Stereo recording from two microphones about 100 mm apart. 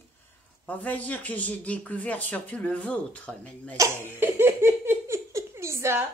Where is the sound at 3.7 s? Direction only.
35° right (ahead or behind).